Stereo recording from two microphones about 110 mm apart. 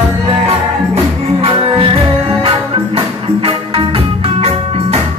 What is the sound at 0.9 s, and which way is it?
Music, 65° right (ahead or behind).